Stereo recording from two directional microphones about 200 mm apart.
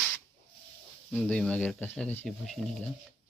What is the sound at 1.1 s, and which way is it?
Speech, 5° left (ahead or behind).